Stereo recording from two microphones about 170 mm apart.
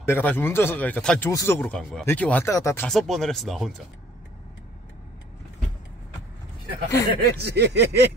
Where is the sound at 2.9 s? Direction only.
Centre (ahead or behind).